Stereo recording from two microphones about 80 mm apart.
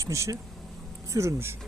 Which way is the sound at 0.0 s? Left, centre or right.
Right.